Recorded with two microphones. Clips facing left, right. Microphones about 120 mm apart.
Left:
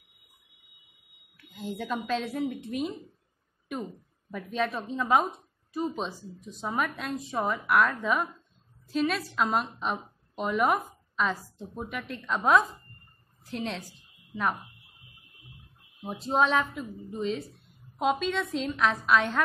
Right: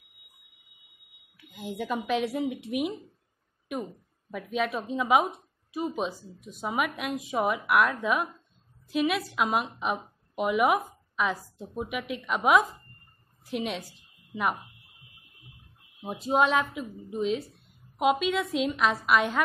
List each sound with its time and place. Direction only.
1.5 s speech: 10° right (ahead or behind)
2.6 s speech: 75° right (ahead or behind)
4.3 s speech: 5° right (ahead or behind)
16.0 s a woman's voice: 5° right (ahead or behind)